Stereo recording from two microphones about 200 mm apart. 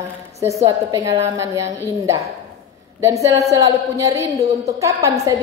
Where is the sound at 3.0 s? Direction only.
15° right (ahead or behind).